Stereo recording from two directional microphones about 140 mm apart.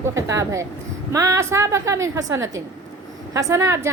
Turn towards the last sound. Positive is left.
turn(degrees=-20)  # may be behind; listen again after turning